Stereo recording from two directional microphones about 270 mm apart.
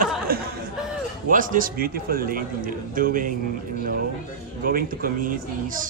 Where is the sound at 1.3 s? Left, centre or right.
Right.